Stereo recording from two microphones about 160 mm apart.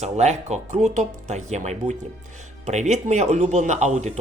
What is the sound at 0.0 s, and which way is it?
Speech, 45° right (ahead or behind).